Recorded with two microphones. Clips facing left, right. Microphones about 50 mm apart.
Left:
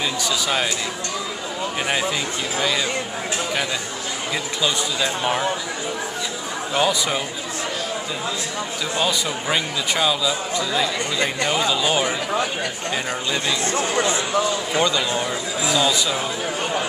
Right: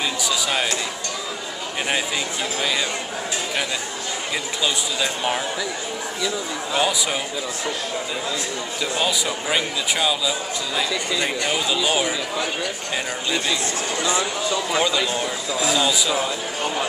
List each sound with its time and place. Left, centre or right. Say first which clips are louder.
0.2 s speech: left 1 dB; centre
4.6 s speech: left 2 dB; centre
6.8 s speech: left 2 dB; centre
8.9 s speech: left 1 dB; centre
13.7 s speech: left 3 dB; left
14.8 s speech: left 3 dB; centre